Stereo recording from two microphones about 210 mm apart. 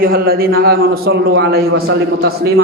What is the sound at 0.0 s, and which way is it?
A man's voice, 45° right (ahead or behind).